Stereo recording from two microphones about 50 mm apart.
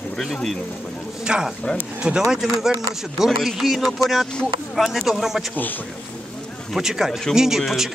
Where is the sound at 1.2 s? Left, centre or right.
Centre.